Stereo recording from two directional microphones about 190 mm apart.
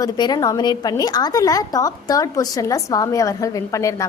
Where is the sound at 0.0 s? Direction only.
20° left (ahead or behind).